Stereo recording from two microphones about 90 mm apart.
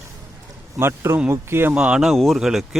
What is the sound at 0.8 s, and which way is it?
Speech, 25° right (ahead or behind).